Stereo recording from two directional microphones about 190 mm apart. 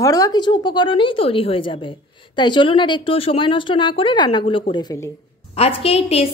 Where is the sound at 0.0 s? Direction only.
20° left (ahead or behind).